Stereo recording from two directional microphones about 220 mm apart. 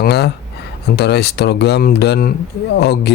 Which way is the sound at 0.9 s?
50° left (ahead or behind).